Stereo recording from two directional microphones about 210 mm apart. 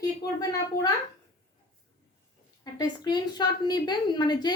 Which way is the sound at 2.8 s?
20° left (ahead or behind).